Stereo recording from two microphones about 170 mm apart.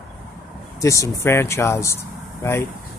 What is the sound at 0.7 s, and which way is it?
Speech, 20° left (ahead or behind).